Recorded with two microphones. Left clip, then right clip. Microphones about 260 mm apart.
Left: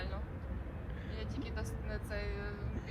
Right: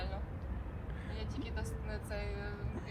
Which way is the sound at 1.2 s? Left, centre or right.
Centre.